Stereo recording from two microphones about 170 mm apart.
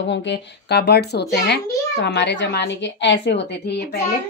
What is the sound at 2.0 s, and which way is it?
A woman's voice, 85° left.